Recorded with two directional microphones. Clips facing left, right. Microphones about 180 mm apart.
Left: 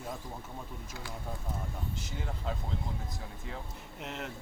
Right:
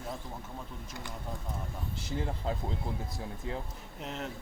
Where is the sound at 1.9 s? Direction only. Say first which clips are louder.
Right 5 dB; 35° right (ahead or behind).